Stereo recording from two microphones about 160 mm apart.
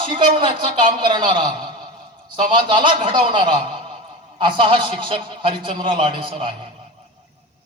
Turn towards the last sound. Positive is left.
turn(degrees=-30)  # may be behind; listen again after turning